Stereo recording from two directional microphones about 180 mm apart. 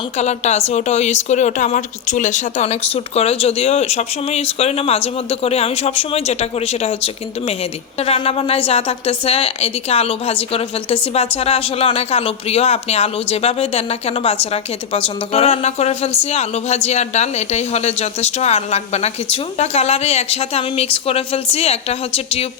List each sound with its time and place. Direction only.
0.2 s speech: 40° left (ahead or behind)